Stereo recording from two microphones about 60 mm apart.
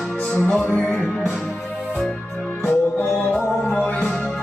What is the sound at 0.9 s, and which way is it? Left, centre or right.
Music, centre.